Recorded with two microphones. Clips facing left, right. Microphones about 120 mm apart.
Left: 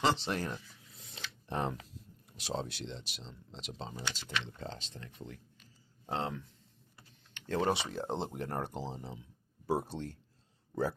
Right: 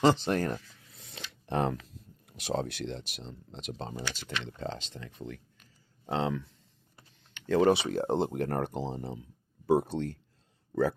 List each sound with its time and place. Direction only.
0.0 s speech: 45° right (ahead or behind)
1.3 s a sound: 70° right (ahead or behind)
2.3 s speech: 60° right (ahead or behind)
4.1 s speech: 75° right (ahead or behind)
7.6 s speech: 60° right (ahead or behind)